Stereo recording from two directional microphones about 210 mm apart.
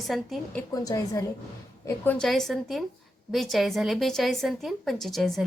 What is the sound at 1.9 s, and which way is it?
A woman's voice, 5° left (ahead or behind).